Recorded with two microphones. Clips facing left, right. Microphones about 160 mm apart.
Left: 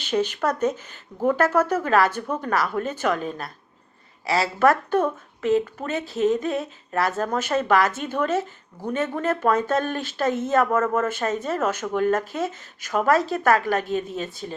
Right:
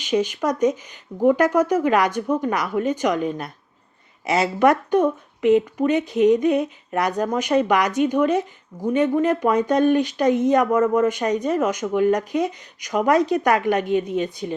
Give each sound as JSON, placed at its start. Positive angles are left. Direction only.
{"t": 0.0, "sound": "speech", "side_deg": -10}